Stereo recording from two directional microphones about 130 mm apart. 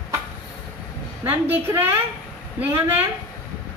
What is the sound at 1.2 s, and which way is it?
A woman's voice, 15° right (ahead or behind).